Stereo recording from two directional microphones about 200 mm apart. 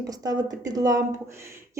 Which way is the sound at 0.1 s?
20° right (ahead or behind).